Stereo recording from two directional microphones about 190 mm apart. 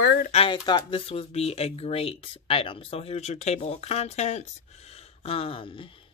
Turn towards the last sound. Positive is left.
turn(degrees=25)  # may be behind; listen again after turning